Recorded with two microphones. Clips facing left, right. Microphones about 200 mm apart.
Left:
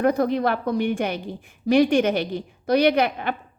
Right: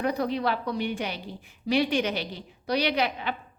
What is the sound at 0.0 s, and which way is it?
A woman's voice, 50° left (ahead or behind).